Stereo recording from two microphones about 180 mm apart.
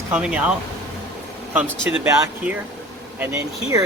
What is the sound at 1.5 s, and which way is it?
Speech, 10° right (ahead or behind).